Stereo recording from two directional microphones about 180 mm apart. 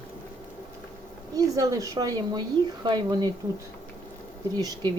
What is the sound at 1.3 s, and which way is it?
Speech, 20° right (ahead or behind).